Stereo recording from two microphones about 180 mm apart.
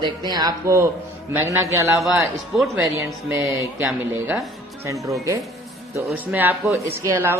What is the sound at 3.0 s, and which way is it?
A woman's voice, 15° right (ahead or behind).